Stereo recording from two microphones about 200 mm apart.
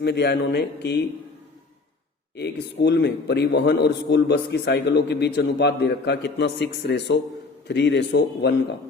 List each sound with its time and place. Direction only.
0.0 s a man's voice: 55° left (ahead or behind)
2.8 s a man's voice: 60° left (ahead or behind)